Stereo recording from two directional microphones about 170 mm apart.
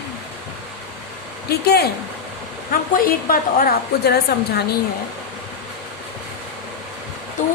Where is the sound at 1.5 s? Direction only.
70° left (ahead or behind).